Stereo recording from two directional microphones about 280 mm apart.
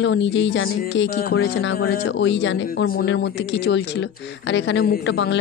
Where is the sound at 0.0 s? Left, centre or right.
Left.